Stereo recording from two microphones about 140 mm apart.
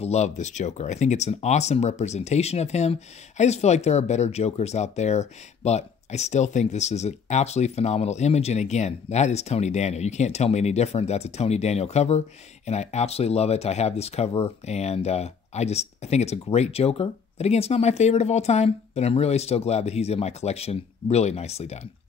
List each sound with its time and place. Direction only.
0.0 s speech: 55° left (ahead or behind)